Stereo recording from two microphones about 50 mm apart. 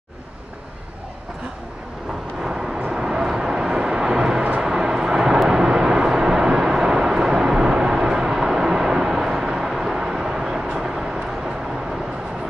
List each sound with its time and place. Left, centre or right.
2.4 s vehicle: centre